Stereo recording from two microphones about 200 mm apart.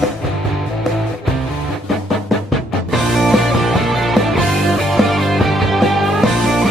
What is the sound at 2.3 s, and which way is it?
Music, centre (ahead or behind).